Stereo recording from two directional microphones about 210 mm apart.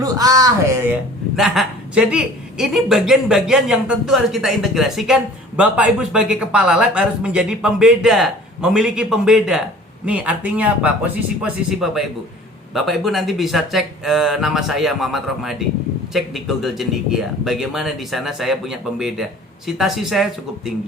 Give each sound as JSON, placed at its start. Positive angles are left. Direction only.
{"t": 0.0, "sound": "speech", "side_deg": -15}
{"t": 1.4, "sound": "a woman's voice", "side_deg": 0}